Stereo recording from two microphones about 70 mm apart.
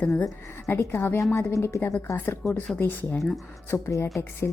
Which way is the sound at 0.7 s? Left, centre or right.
Left.